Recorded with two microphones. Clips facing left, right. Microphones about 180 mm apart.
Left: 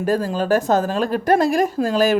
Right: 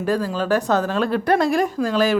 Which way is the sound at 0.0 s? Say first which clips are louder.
Left 2 dB; 45° left (ahead or behind).